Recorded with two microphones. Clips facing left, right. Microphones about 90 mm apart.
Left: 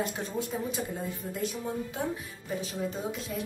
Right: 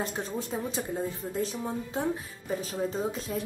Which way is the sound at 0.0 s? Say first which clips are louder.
Even; 35° right (ahead or behind).